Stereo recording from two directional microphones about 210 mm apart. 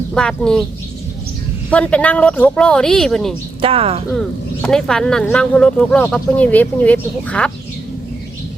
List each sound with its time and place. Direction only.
0.1 s speech: 5° left (ahead or behind)
1.7 s speech: 5° left (ahead or behind)
3.6 s speech: 25° right (ahead or behind)
4.6 s speech: 5° left (ahead or behind)